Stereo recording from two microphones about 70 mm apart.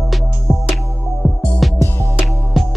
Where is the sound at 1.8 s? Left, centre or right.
Left.